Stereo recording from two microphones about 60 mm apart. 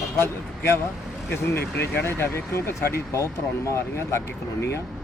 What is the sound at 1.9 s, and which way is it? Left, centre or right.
Speech, left.